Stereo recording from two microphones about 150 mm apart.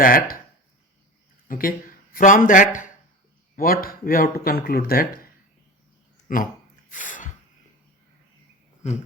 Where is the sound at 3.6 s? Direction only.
75° left (ahead or behind).